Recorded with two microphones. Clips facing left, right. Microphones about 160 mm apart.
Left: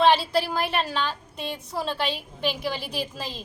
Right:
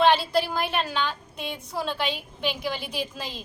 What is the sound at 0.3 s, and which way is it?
A woman's voice, centre (ahead or behind).